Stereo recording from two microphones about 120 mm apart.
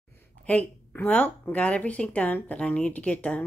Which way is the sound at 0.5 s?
15° left (ahead or behind).